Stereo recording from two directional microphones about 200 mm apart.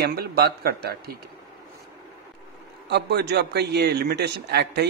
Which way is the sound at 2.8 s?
55° right (ahead or behind).